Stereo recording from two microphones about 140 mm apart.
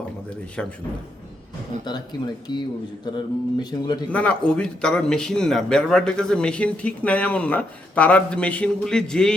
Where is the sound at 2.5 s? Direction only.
30° left (ahead or behind).